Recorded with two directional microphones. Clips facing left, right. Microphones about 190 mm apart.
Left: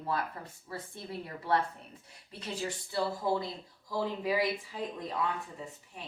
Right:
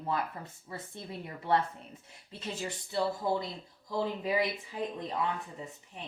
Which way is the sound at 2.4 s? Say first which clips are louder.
Left 1 dB; 20° right (ahead or behind).